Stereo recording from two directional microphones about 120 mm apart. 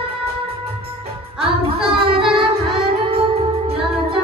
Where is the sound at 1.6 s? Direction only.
45° right (ahead or behind).